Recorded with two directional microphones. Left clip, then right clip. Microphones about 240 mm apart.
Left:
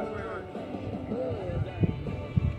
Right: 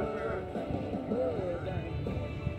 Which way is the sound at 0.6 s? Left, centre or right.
Right.